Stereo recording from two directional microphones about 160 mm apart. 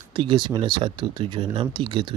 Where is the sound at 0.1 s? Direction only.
30° right (ahead or behind).